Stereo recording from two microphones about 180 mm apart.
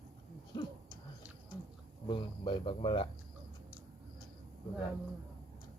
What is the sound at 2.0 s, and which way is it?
Speech, 25° left (ahead or behind).